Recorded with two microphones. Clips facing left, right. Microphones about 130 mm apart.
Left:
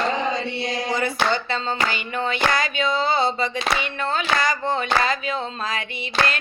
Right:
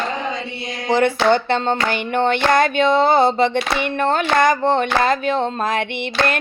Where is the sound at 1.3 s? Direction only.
60° right (ahead or behind).